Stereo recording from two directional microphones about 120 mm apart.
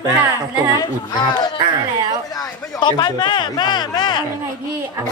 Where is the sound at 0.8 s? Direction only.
35° left (ahead or behind).